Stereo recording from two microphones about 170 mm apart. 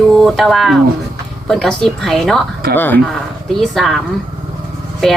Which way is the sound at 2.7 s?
10° left (ahead or behind).